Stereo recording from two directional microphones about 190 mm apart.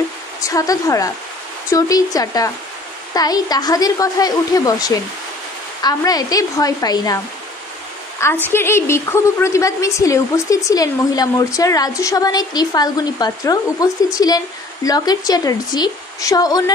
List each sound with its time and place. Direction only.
0.4 s a woman's voice: 15° left (ahead or behind)
8.5 s a woman's voice: 10° left (ahead or behind)